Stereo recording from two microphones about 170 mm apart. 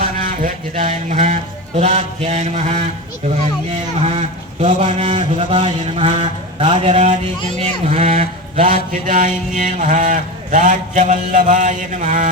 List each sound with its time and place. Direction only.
0.2 s mantra: 55° right (ahead or behind)
4.0 s a man's voice: 35° right (ahead or behind)
7.3 s mantra: 45° right (ahead or behind)